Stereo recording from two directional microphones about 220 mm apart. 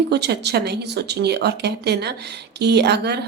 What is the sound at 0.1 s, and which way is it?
A woman's voice, 50° right (ahead or behind).